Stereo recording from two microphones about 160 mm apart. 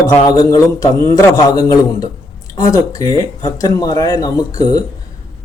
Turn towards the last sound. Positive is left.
turn(degrees=25)  # may be behind; listen again after turning